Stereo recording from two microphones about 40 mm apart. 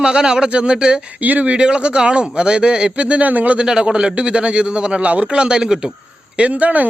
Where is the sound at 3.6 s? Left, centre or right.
Centre.